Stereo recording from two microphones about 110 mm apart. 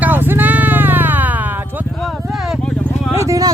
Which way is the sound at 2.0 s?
Centre (ahead or behind).